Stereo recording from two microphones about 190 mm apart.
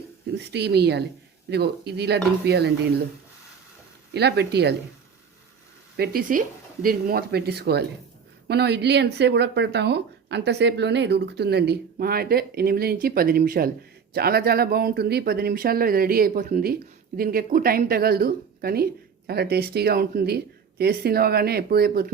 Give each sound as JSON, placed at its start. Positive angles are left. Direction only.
{"t": 0.3, "sound": "speech", "side_deg": -60}
{"t": 4.1, "sound": "speech", "side_deg": -60}
{"t": 6.0, "sound": "speech", "side_deg": -50}